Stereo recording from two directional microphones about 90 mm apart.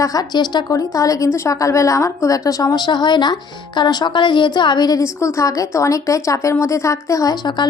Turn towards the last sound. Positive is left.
turn(degrees=50)  # may be behind; listen again after turning